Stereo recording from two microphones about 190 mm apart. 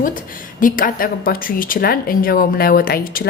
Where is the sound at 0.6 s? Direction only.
50° left (ahead or behind).